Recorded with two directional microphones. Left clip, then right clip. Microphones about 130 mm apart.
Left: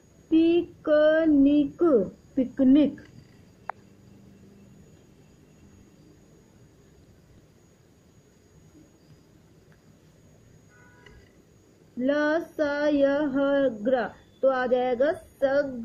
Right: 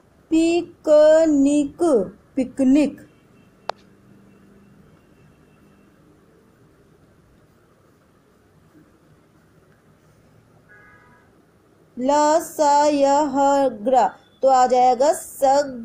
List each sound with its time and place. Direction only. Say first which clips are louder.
0.3 s a sound: right 3 dB; 20° right (ahead or behind)
2.3 s a woman's voice: right 3 dB; 15° right (ahead or behind)
12.0 s a woman's voice: right 8 dB; 15° right (ahead or behind)